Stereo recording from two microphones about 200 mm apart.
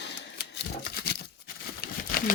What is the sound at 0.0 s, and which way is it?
Typewriter, 60° left (ahead or behind).